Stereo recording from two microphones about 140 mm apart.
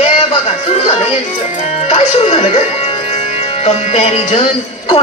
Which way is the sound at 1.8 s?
50° left (ahead or behind).